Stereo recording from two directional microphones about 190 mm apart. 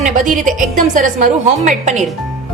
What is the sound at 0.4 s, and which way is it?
A woman's voice, 45° right (ahead or behind).